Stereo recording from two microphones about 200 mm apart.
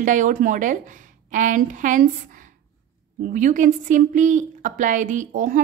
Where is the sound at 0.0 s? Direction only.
40° right (ahead or behind).